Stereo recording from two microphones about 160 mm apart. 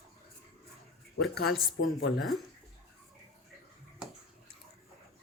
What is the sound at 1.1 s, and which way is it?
Speech, 90° left.